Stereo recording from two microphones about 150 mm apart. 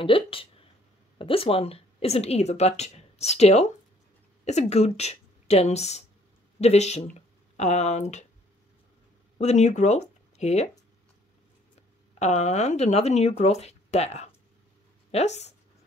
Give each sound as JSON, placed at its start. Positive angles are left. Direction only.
{"t": 0.0, "sound": "a woman's voice", "side_deg": 35}
{"t": 9.4, "sound": "speech", "side_deg": 50}
{"t": 12.2, "sound": "speech", "side_deg": 50}